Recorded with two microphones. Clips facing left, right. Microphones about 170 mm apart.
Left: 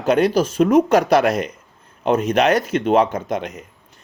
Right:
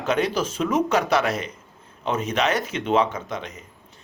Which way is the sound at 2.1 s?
55° left (ahead or behind).